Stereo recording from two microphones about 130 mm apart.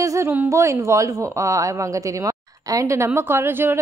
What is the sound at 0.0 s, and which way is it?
A woman's voice, 25° right (ahead or behind).